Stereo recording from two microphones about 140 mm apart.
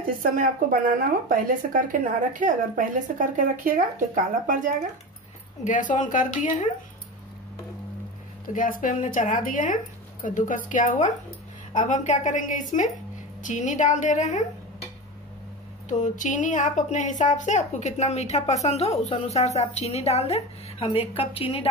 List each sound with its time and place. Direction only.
0.1 s speech: 85° right
5.6 s a woman's voice: 65° left (ahead or behind)
8.5 s a woman's voice: 75° left (ahead or behind); by 14.4 s 60° left (ahead or behind)
15.9 s a woman's voice: 60° left (ahead or behind); by 21.6 s 40° left (ahead or behind)